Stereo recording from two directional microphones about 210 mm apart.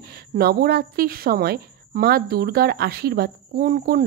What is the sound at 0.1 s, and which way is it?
A woman's voice, 45° right (ahead or behind).